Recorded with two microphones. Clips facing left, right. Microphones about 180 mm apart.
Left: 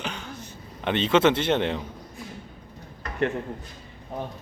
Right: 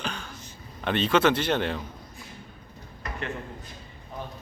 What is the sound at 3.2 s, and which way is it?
Speech, 60° left (ahead or behind).